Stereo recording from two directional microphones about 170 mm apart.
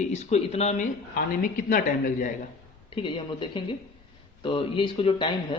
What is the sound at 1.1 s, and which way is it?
A woman's voice, 55° left (ahead or behind).